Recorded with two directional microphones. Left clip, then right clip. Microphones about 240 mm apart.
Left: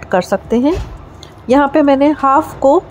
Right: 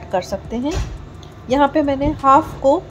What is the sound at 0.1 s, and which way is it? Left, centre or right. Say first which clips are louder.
A woman's voice: left 8 dB; left.